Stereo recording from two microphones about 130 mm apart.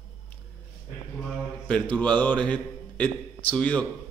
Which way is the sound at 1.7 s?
10° left (ahead or behind).